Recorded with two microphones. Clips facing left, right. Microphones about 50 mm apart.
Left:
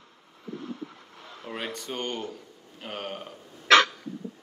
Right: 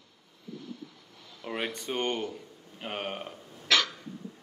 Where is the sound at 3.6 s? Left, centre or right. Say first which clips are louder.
Left 8 dB; left.